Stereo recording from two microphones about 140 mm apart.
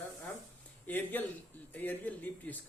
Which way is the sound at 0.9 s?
15° left (ahead or behind).